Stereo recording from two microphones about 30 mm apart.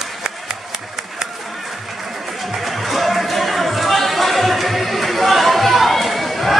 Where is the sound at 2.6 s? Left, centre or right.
Centre.